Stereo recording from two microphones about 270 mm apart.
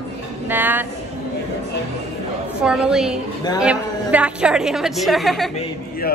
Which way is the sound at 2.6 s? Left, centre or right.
Centre.